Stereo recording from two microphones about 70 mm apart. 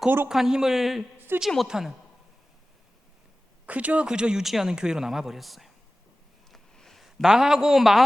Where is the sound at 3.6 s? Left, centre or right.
Right.